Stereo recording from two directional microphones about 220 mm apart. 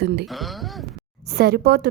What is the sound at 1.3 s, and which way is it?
Speech, 45° right (ahead or behind).